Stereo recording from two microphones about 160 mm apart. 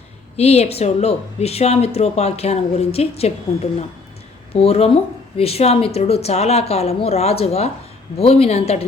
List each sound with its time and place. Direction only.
0.3 s speech: 40° left (ahead or behind)
4.5 s speech: 40° left (ahead or behind)